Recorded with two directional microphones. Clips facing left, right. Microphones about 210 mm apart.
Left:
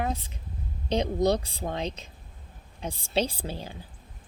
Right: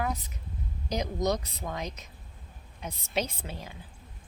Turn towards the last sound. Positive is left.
turn(degrees=30)  # may be behind; listen again after turning